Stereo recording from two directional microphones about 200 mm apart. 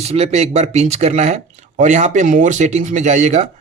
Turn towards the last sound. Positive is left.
turn(degrees=-35)  # may be behind; listen again after turning